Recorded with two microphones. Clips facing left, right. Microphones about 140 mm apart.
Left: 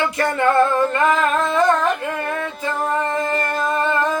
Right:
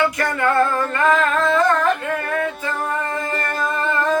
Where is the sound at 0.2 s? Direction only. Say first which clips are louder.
Left 2 dB; 25° left (ahead or behind).